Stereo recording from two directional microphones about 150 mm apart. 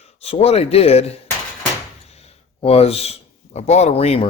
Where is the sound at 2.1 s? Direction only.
45° left (ahead or behind).